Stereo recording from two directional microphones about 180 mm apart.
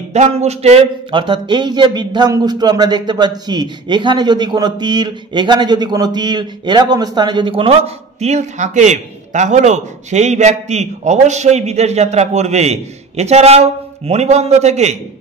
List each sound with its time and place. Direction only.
0.1 s speech: 40° right (ahead or behind)